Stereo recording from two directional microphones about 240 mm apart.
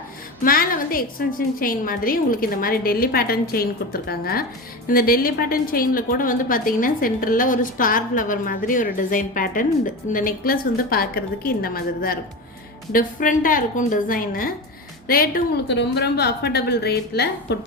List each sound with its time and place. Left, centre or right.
0.4 s a woman's voice: left